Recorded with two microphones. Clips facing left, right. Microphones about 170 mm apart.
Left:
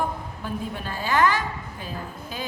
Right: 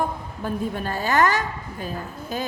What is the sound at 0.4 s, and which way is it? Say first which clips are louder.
A woman's voice: right 5 dB; 45° right (ahead or behind).